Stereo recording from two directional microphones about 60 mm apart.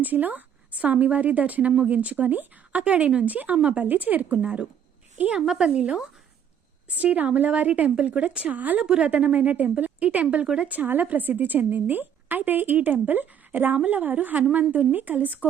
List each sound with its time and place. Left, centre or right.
0.0 s a woman's voice: right
3.8 s a woman's voice: right
5.4 s speech: centre
5.6 s a woman's voice: centre
8.8 s a woman's voice: centre
10.7 s a woman's voice: right